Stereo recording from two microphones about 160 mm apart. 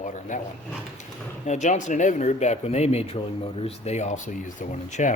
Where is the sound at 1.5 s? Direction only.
50° left (ahead or behind).